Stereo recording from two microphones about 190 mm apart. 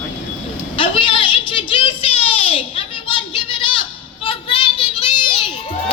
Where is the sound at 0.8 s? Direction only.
25° left (ahead or behind).